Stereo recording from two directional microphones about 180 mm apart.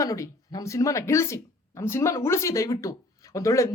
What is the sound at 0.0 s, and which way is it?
Speech, 20° left (ahead or behind).